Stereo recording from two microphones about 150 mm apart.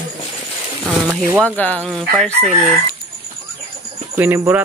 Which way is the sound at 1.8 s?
Centre (ahead or behind).